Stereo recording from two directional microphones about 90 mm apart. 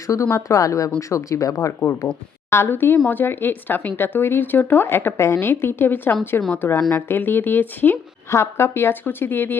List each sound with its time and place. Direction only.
0.1 s speech: 35° left (ahead or behind)
2.5 s a woman's voice: 25° left (ahead or behind)
8.3 s a woman's voice: 30° left (ahead or behind)